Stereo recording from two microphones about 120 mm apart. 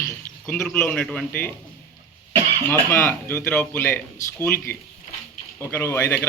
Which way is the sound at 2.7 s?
20° left (ahead or behind).